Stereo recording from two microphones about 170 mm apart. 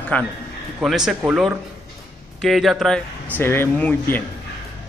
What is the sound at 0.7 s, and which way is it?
A man's voice, 5° right (ahead or behind).